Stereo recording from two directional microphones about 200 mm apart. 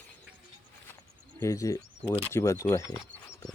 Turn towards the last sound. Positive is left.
turn(degrees=15)  # may be behind; listen again after turning